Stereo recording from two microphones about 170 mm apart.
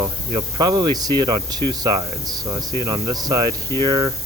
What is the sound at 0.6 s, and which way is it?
Speech, 25° right (ahead or behind).